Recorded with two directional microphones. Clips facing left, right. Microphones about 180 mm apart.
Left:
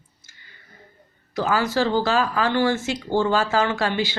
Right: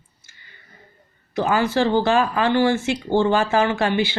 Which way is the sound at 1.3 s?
15° right (ahead or behind).